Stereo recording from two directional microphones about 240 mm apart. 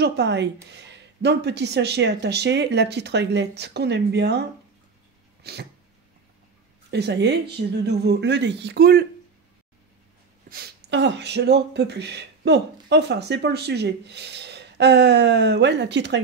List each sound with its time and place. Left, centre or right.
0.0 s speech: right
5.4 s dog: right
6.9 s speech: right
10.5 s speech: right